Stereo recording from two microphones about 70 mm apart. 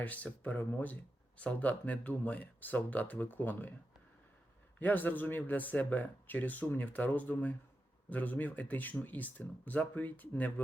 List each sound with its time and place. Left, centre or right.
0.0 s speech: left
4.8 s speech: left